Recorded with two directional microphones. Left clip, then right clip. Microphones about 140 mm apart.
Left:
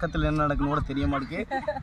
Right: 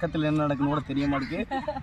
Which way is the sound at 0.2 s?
10° right (ahead or behind).